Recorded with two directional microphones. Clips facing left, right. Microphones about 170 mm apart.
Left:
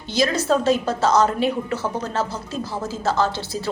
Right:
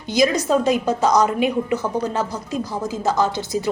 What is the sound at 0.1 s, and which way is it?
A woman's voice, 15° right (ahead or behind).